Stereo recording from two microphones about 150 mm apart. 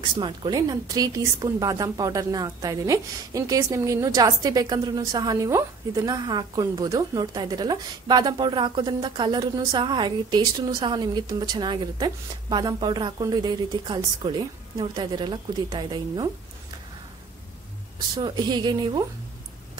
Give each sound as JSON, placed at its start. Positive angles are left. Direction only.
{"t": 0.2, "sound": "a woman's voice", "side_deg": -30}
{"t": 17.9, "sound": "a woman's voice", "side_deg": -30}